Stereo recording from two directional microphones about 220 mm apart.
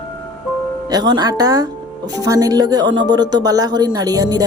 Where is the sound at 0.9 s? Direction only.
20° right (ahead or behind).